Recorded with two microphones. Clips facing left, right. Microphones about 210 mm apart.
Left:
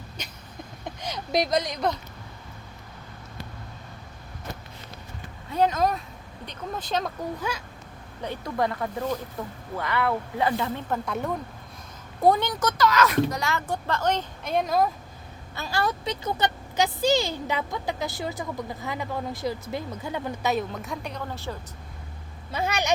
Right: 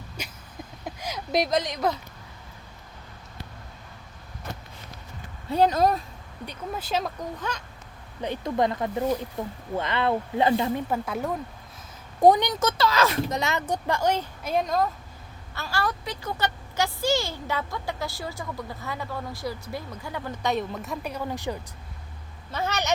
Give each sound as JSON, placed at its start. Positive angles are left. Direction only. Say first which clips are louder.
{"t": 0.2, "sound": "a sound", "louder": "right 3 dB", "side_deg": -10}
{"t": 0.9, "sound": "speech", "louder": "even", "side_deg": -5}
{"t": 5.5, "sound": "speech", "louder": "right 2 dB", "side_deg": -35}
{"t": 6.4, "sound": "speech", "louder": "right 1 dB", "side_deg": -10}
{"t": 7.3, "sound": "speech", "louder": "left 2 dB", "side_deg": 10}
{"t": 8.2, "sound": "speech", "louder": "right 2 dB", "side_deg": -20}
{"t": 10.8, "sound": "speech", "louder": "right 1 dB", "side_deg": -10}
{"t": 12.2, "sound": "speech", "louder": "right 3 dB", "side_deg": -15}
{"t": 15.5, "sound": "speech", "louder": "left 2 dB", "side_deg": 20}
{"t": 20.4, "sound": "a woman's voice", "louder": "right 1 dB", "side_deg": 0}
{"t": 22.5, "sound": "speech", "louder": "left 1 dB", "side_deg": 10}